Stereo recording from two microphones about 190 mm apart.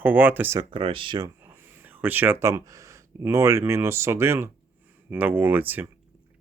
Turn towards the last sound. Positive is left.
turn(degrees=-10)  # may be behind; listen again after turning